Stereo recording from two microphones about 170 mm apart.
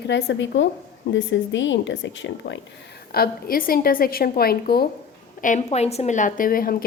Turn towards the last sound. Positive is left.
turn(degrees=55)  # may be behind; listen again after turning